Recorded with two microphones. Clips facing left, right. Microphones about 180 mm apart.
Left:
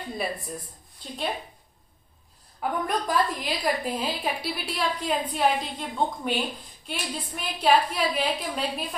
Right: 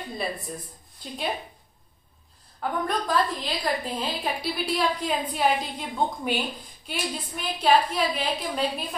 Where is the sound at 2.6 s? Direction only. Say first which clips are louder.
Even; 10° left (ahead or behind).